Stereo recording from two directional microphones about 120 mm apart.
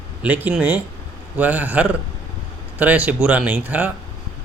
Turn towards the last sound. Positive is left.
turn(degrees=-15)  # may be behind; listen again after turning